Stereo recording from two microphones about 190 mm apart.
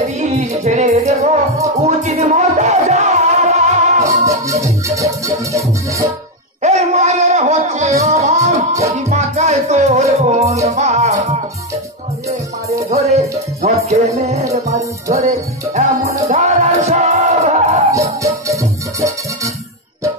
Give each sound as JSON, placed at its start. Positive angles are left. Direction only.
{"t": 0.0, "sound": "music", "side_deg": -35}
{"t": 4.3, "sound": "music", "side_deg": -15}
{"t": 6.6, "sound": "music", "side_deg": -35}
{"t": 12.3, "sound": "music", "side_deg": -35}
{"t": 16.3, "sound": "music", "side_deg": -40}
{"t": 17.9, "sound": "music", "side_deg": -15}